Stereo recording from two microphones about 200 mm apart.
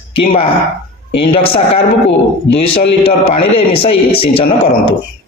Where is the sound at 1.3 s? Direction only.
30° left (ahead or behind).